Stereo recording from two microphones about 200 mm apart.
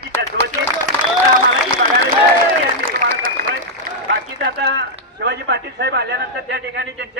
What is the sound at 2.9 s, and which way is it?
Run, 45° right (ahead or behind).